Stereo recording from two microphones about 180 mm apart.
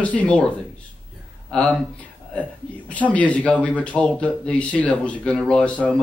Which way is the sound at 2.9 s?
10° left (ahead or behind).